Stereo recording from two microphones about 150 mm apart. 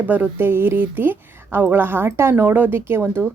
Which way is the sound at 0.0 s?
10° right (ahead or behind).